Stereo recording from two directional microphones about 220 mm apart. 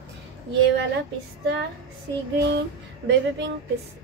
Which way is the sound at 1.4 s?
55° right (ahead or behind).